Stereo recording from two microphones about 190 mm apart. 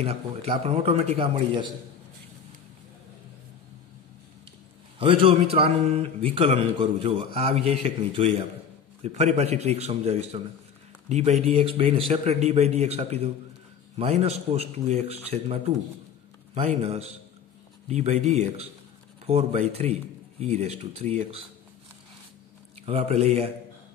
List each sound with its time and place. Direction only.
0.0 s a man's voice: 35° right (ahead or behind)
4.9 s a man's voice: 25° right (ahead or behind)
22.8 s speech: 30° right (ahead or behind)